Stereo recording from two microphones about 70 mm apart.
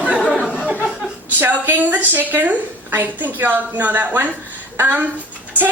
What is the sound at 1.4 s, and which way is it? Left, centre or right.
A woman's voice, right.